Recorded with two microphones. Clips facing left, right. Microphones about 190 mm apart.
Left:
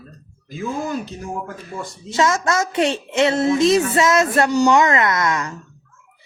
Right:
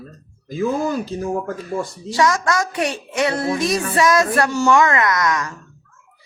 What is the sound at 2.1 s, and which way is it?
Speech, 25° left (ahead or behind).